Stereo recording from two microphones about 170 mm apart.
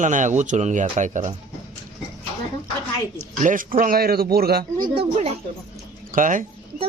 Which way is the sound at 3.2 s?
50° right (ahead or behind).